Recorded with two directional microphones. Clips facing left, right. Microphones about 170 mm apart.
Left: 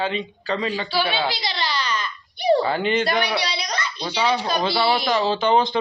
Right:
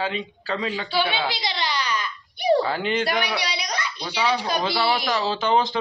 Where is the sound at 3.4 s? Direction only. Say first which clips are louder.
Left 2 dB; 10° right (ahead or behind).